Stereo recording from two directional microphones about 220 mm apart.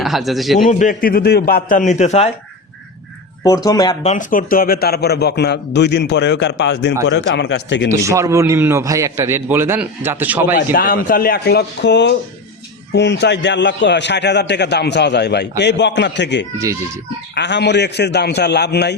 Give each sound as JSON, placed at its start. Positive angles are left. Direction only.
{"t": 0.0, "sound": "a man's voice", "side_deg": 0}
{"t": 0.7, "sound": "a man's voice", "side_deg": 35}
{"t": 3.4, "sound": "speech", "side_deg": 15}
{"t": 4.0, "sound": "a man's voice", "side_deg": 35}
{"t": 7.9, "sound": "a man's voice", "side_deg": -15}
{"t": 10.5, "sound": "a man's voice", "side_deg": 40}